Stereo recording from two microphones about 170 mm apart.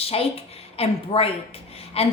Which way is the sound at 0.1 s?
35° left (ahead or behind).